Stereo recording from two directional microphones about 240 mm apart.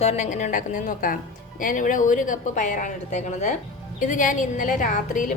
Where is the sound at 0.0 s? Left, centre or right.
Left.